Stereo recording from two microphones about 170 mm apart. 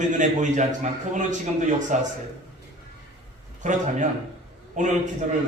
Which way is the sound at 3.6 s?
45° right (ahead or behind).